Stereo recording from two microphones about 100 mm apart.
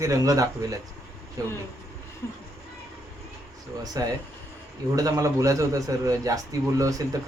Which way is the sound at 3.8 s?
40° right (ahead or behind).